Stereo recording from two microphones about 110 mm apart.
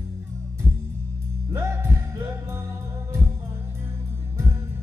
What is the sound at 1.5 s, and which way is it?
Music, 25° right (ahead or behind).